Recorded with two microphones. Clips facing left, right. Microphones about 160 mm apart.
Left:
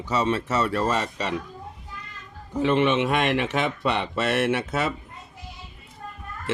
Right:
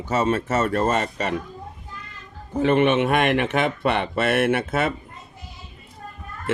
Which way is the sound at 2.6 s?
55° right (ahead or behind).